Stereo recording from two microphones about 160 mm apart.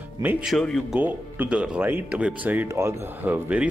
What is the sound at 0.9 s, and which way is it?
Speech, 10° right (ahead or behind).